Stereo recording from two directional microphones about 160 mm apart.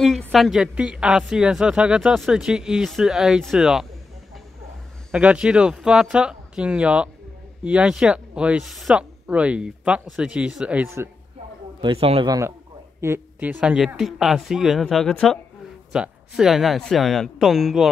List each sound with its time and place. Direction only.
0.0 s speech: centre (ahead or behind)
5.1 s speech: 5° right (ahead or behind)
11.8 s a man's voice: 35° right (ahead or behind)
12.3 s a man's voice: 20° right (ahead or behind); by 17.8 s centre (ahead or behind)